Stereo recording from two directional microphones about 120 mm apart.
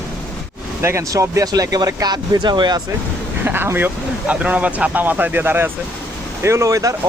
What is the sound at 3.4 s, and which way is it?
Speech, 15° right (ahead or behind).